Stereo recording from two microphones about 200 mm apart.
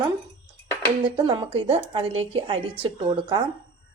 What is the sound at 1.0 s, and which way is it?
Speech, 25° right (ahead or behind).